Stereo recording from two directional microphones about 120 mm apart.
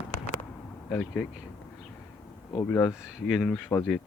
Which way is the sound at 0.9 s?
10° left (ahead or behind).